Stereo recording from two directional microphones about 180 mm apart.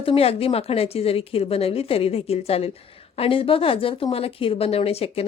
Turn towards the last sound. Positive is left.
turn(degrees=35)  # may be behind; listen again after turning